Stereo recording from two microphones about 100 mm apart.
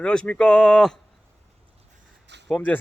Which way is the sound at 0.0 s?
10° left (ahead or behind).